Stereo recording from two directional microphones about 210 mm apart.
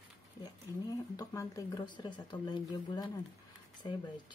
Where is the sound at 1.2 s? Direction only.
15° left (ahead or behind).